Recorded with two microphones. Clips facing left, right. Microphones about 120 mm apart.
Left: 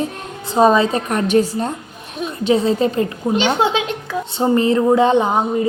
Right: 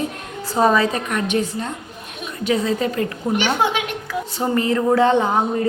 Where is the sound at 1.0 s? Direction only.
35° left (ahead or behind).